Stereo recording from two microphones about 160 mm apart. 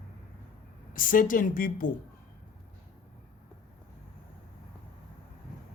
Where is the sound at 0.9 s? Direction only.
60° left (ahead or behind).